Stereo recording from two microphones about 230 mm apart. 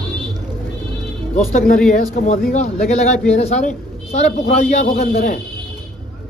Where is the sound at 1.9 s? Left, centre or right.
Left.